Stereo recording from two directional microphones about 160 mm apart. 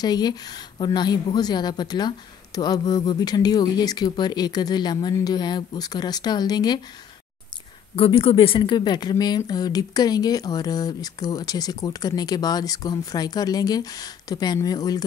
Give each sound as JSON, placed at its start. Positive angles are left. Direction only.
{"t": 0.0, "sound": "speech", "side_deg": 25}
{"t": 7.9, "sound": "speech", "side_deg": 35}